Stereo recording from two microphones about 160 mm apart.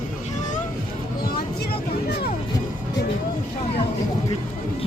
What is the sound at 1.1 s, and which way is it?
Speech, 70° left (ahead or behind).